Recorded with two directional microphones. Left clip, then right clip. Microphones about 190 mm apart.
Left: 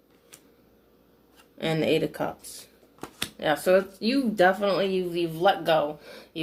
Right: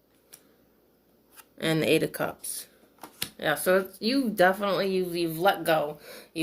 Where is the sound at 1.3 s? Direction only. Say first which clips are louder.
Right 1 dB; 45° right (ahead or behind).